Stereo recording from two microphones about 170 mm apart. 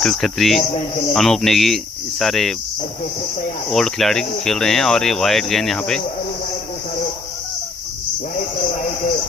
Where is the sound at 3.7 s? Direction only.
5° left (ahead or behind).